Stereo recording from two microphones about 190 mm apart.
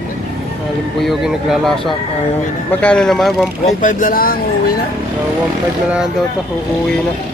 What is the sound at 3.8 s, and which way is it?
Speech, 45° left (ahead or behind).